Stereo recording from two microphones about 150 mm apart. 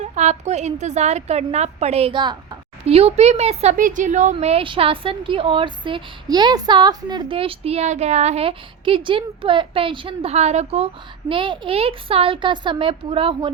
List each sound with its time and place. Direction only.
0.0 s a woman's voice: 50° right (ahead or behind)
3.8 s a woman's voice: 60° right (ahead or behind); by 10.8 s 45° right (ahead or behind)
11.3 s a woman's voice: 35° right (ahead or behind)